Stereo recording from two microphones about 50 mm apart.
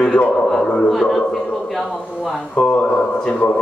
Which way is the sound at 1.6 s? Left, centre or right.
Centre.